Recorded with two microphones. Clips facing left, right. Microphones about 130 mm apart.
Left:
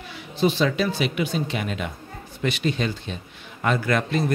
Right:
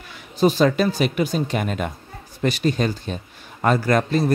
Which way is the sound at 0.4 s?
40° right (ahead or behind).